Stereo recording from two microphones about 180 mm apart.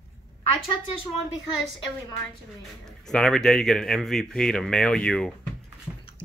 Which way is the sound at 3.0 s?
5° left (ahead or behind).